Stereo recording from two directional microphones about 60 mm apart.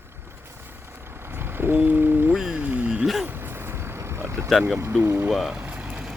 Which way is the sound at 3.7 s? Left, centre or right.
Right.